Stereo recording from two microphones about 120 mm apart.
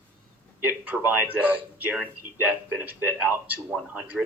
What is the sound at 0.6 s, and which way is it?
A man's voice, 15° right (ahead or behind).